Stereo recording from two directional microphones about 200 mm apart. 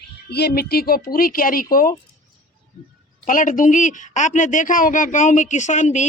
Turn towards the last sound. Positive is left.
turn(degrees=35)  # may be behind; listen again after turning